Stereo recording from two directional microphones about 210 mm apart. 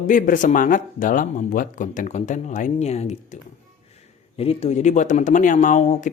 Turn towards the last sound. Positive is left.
turn(degrees=35)  # may be behind; listen again after turning